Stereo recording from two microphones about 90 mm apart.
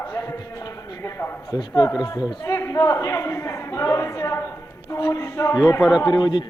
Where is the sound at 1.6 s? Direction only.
50° left (ahead or behind).